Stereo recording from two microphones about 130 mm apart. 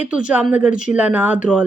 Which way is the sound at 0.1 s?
10° right (ahead or behind).